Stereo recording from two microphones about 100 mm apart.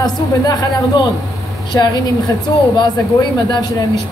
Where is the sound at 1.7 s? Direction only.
30° left (ahead or behind).